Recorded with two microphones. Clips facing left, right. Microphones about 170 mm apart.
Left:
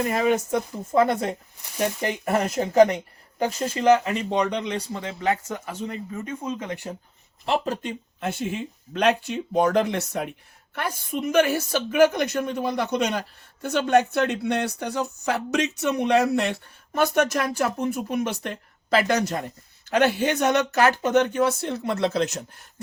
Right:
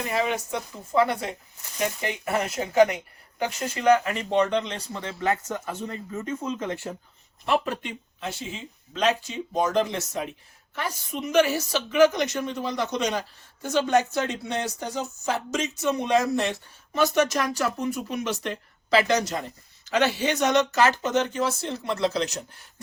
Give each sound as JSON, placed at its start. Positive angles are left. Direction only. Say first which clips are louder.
{"t": 0.0, "sound": "speech", "louder": "left 4 dB", "side_deg": 50}
{"t": 4.1, "sound": "speech", "louder": "right 1 dB", "side_deg": 15}
{"t": 7.4, "sound": "speech", "louder": "even", "side_deg": 25}
{"t": 7.7, "sound": "a woman's voice", "louder": "left 3 dB", "side_deg": 45}